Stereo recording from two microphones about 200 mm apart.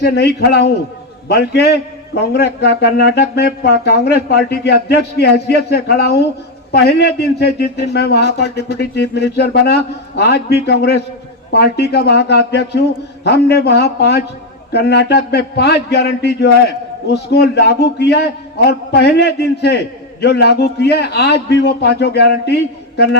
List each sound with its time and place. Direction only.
0.0 s speech: 55° left (ahead or behind)